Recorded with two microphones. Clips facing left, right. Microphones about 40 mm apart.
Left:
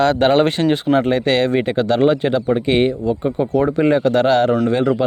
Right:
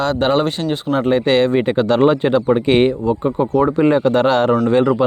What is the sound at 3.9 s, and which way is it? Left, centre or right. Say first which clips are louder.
Speech: even; right.